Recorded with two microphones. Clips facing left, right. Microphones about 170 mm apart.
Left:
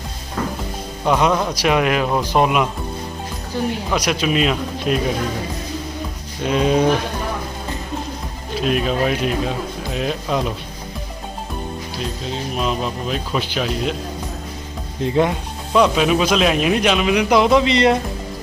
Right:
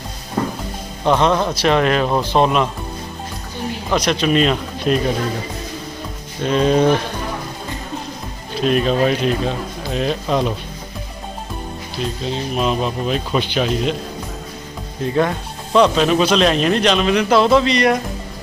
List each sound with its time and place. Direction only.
1.0 s speech: 10° left (ahead or behind)
3.9 s speech: 10° left (ahead or behind)
6.4 s speech: 10° left (ahead or behind)
8.6 s speech: 5° left (ahead or behind)
12.3 s speech: centre (ahead or behind)
15.0 s speech: 20° left (ahead or behind)
15.7 s speech: 5° left (ahead or behind)